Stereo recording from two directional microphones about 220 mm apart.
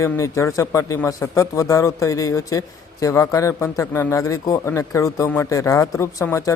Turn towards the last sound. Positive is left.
turn(degrees=15)  # may be behind; listen again after turning